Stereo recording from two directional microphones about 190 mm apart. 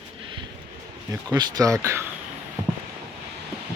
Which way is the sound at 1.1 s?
20° right (ahead or behind).